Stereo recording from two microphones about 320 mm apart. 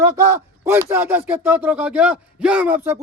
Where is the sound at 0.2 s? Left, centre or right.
Centre.